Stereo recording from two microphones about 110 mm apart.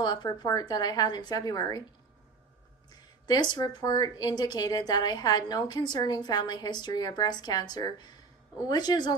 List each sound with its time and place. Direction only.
0.0 s a woman's voice: 45° left (ahead or behind)
3.3 s a woman's voice: 40° left (ahead or behind)